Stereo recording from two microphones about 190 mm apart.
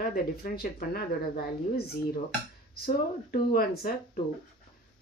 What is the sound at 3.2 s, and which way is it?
Speech, 55° left (ahead or behind).